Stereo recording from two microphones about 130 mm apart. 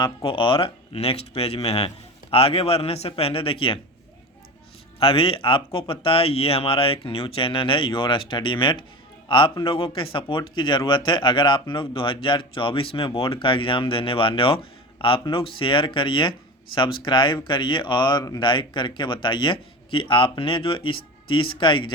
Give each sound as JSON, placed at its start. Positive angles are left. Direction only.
{"t": 0.0, "sound": "speech", "side_deg": 40}
{"t": 4.9, "sound": "speech", "side_deg": 45}